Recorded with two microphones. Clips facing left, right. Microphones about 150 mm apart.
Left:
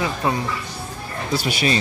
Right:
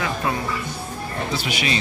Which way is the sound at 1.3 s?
40° left (ahead or behind).